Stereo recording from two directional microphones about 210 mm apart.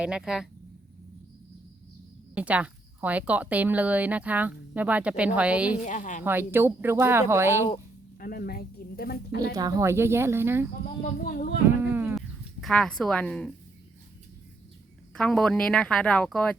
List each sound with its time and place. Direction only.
0.0 s a woman's voice: 5° right (ahead or behind)
2.3 s a woman's voice: 5° right (ahead or behind)
5.8 s a woman's voice: 35° left (ahead or behind)
6.2 s a woman's voice: 10° right (ahead or behind)
8.2 s speech: 45° left (ahead or behind)
9.4 s a woman's voice: 15° right (ahead or behind)
11.0 s speech: 40° left (ahead or behind)
11.8 s a sound: 10° right (ahead or behind)
15.1 s a woman's voice: 5° left (ahead or behind)